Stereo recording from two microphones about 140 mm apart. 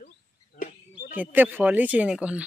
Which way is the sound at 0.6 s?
90° left.